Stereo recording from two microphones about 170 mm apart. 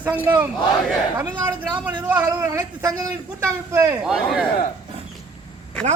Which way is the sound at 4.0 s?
5° right (ahead or behind).